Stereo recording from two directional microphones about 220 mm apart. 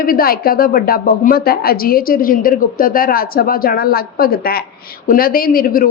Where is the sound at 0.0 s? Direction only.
40° left (ahead or behind).